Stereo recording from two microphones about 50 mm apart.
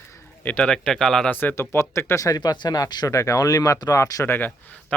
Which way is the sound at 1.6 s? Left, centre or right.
Left.